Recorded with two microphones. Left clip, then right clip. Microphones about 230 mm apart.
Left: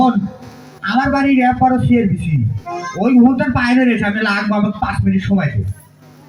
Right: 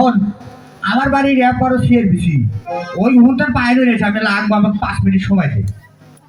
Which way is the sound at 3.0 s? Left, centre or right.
Right.